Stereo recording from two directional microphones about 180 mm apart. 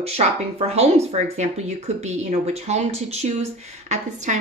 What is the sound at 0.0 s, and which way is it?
A woman's voice, 35° right (ahead or behind).